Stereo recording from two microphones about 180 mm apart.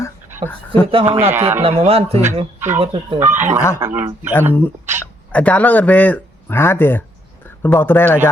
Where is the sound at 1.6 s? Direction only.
35° right (ahead or behind).